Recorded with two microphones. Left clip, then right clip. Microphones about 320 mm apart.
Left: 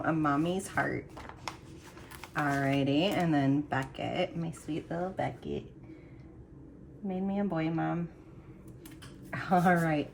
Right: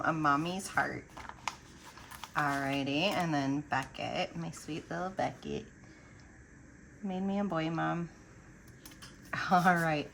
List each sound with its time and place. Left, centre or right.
0.0 s speech: centre
7.1 s speech: centre
9.3 s speech: centre